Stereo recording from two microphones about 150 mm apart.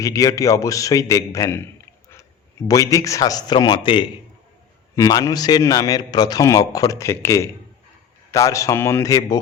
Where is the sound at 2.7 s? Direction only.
25° left (ahead or behind).